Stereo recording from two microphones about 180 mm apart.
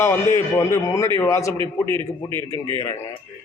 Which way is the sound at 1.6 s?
25° right (ahead or behind).